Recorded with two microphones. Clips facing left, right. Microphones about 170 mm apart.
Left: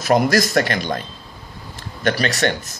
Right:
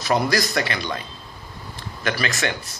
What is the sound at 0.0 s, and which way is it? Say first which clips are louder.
A man's voice: left 5 dB; 45° left (ahead or behind).